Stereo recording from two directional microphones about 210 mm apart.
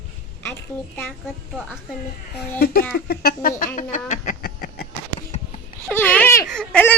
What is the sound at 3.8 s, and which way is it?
Speech, 35° left (ahead or behind).